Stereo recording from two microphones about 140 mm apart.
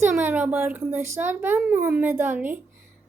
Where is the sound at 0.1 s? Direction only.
10° right (ahead or behind).